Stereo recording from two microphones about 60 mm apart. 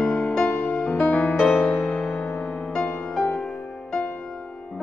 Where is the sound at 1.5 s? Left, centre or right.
Centre.